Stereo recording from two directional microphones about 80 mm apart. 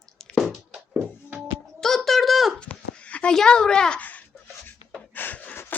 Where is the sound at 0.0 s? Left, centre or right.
Centre.